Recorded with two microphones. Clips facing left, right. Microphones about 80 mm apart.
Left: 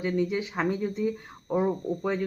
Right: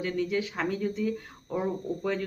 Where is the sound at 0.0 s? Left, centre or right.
Left.